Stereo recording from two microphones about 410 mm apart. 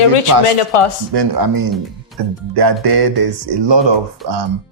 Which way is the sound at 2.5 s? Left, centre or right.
Right.